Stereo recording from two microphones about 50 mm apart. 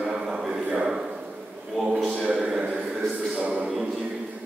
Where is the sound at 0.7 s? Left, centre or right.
Centre.